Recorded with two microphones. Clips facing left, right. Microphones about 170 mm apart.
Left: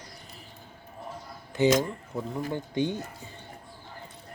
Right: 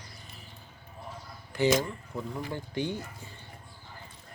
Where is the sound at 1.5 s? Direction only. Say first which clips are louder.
Left 3 dB; 20° left (ahead or behind).